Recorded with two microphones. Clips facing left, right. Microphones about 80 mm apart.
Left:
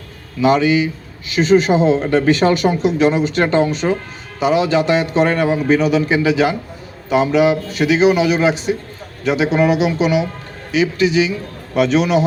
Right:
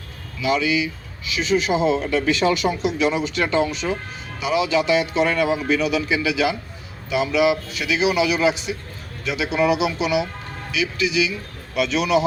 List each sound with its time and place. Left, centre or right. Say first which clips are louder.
0.3 s a man's voice: left 7 dB; left
10.7 s a man's voice: left 8 dB; left